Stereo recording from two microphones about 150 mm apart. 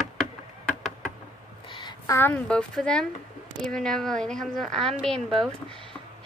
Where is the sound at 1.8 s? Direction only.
30° left (ahead or behind).